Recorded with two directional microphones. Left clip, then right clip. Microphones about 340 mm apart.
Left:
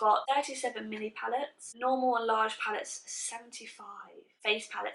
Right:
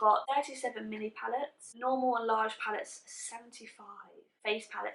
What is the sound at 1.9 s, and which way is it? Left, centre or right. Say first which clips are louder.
Speech: left 2 dB; centre.